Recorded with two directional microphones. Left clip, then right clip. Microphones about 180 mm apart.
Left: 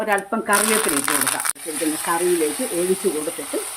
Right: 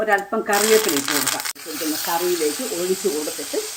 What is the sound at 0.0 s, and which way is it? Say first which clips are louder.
Speech: right 2 dB; 30° left (ahead or behind).